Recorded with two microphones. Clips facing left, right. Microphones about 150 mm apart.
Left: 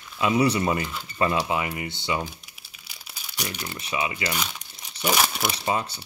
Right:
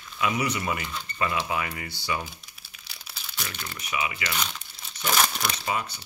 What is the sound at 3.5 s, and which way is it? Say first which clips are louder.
Speech: left 4 dB; 15° left (ahead or behind).